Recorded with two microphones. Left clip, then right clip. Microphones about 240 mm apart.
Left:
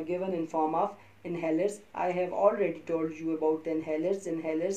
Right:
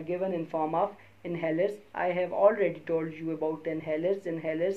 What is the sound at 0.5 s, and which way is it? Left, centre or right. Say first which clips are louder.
Speech: left 1 dB; right.